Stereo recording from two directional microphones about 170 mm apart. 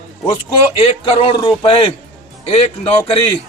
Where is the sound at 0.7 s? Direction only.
35° left (ahead or behind).